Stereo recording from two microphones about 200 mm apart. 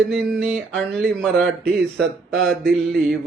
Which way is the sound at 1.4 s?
55° right (ahead or behind).